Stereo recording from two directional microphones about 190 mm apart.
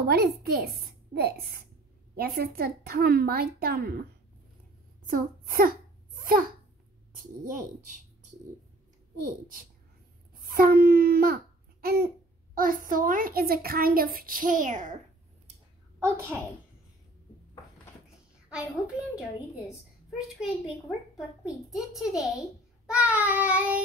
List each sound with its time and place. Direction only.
0.0 s a woman's voice: 55° right (ahead or behind)
5.0 s a child's voice: 50° right (ahead or behind)
10.5 s a child's voice: 50° right (ahead or behind)
16.0 s child singing: 15° right (ahead or behind)
20.1 s a child's voice: centre (ahead or behind)
22.8 s child singing: 5° right (ahead or behind)